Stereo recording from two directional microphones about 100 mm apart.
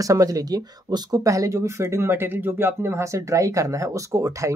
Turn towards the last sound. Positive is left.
turn(degrees=-30)  # may be behind; listen again after turning